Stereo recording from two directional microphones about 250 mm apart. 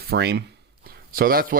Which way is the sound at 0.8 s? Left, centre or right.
Right.